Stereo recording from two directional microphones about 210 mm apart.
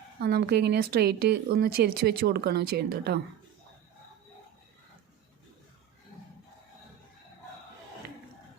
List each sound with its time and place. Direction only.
0.2 s a woman's voice: 50° right (ahead or behind)